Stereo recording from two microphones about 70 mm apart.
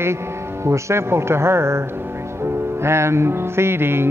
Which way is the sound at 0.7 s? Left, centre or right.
Right.